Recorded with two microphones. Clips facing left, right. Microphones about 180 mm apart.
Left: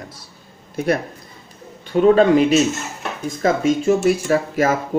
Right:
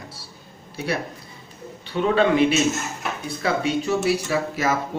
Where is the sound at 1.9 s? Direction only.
40° left (ahead or behind).